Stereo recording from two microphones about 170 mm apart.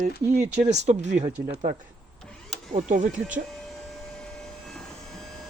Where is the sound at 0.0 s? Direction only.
45° right (ahead or behind).